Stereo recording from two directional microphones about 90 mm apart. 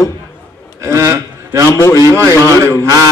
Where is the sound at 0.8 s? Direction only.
30° right (ahead or behind).